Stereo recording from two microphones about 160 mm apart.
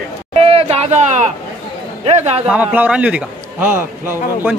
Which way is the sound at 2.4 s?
10° right (ahead or behind).